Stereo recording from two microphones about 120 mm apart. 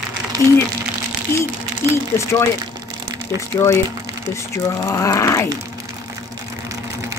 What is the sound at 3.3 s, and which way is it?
Speech, 25° left (ahead or behind).